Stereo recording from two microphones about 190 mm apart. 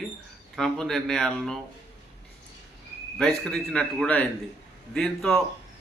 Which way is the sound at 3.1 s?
5° left (ahead or behind).